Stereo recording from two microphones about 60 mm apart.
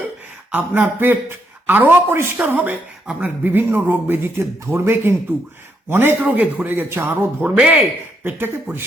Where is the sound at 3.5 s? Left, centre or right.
Right.